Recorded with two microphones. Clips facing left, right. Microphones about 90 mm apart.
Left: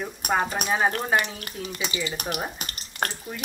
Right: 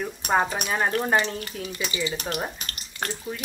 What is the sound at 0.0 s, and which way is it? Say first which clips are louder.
Speech: right 2 dB; centre (ahead or behind).